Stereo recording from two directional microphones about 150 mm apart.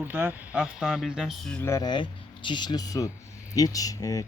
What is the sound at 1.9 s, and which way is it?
Speech, 30° left (ahead or behind).